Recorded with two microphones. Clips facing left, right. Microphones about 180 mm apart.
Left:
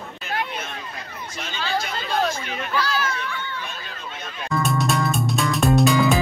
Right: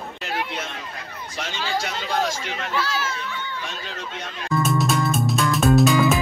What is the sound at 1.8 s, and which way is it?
Speech, 90° right.